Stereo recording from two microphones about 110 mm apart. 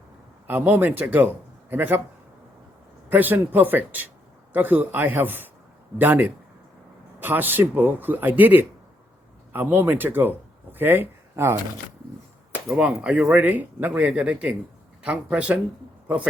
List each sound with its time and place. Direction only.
0.4 s a man's voice: 15° right (ahead or behind)
3.1 s a man's voice: 15° right (ahead or behind)
12.6 s a man's voice: 10° right (ahead or behind)